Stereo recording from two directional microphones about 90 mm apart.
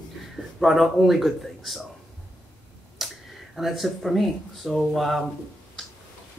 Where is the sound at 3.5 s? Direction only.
Centre (ahead or behind).